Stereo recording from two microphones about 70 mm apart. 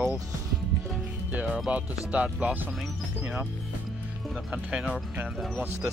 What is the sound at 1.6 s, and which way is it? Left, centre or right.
Speech, centre.